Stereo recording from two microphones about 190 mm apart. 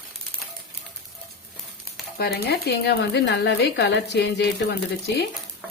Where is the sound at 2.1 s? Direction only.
60° left (ahead or behind).